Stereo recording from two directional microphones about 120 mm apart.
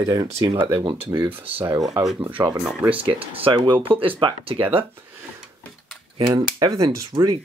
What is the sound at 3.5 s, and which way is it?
Speech, 40° right (ahead or behind).